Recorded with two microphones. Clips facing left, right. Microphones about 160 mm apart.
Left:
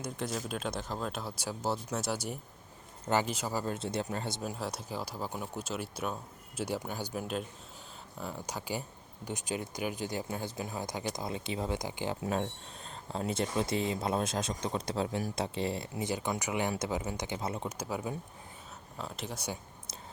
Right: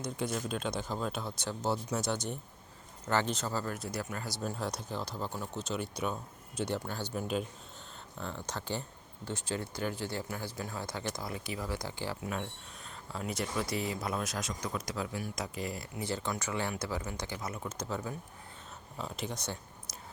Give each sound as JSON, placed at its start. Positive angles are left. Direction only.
{"t": 0.0, "sound": "speech", "side_deg": 0}
{"t": 3.8, "sound": "speech", "side_deg": 25}
{"t": 4.4, "sound": "speech", "side_deg": 5}
{"t": 12.2, "sound": "speech", "side_deg": 30}
{"t": 17.7, "sound": "speech", "side_deg": 10}
{"t": 18.9, "sound": "speech", "side_deg": 0}